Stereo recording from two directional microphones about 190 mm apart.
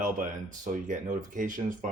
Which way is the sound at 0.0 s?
45° right (ahead or behind).